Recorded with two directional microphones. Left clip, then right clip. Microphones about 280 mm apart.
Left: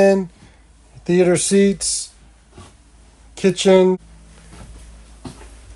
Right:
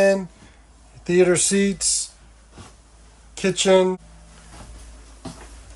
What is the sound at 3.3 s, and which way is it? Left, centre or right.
Speech, centre.